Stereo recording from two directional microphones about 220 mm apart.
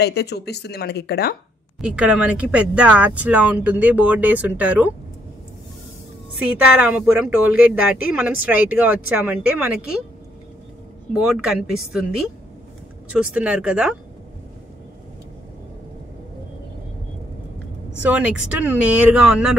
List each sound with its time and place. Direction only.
0.0 s speech: 50° left (ahead or behind)
1.8 s speech: 5° right (ahead or behind)
6.4 s speech: 5° right (ahead or behind)
11.1 s speech: 5° right (ahead or behind)
13.1 s speech: 5° right (ahead or behind)
18.1 s speech: 5° right (ahead or behind)